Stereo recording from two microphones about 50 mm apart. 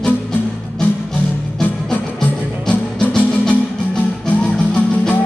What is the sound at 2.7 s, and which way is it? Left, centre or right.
Music, centre.